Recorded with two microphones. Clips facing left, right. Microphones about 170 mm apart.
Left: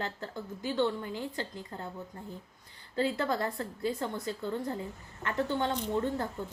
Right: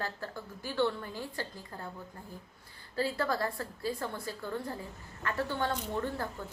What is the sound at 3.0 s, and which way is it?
Speech, 20° left (ahead or behind).